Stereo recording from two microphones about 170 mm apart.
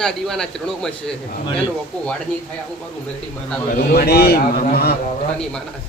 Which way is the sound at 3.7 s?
65° left (ahead or behind).